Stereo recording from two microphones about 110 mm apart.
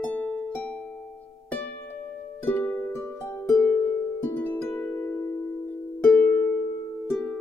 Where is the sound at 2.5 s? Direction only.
15° left (ahead or behind).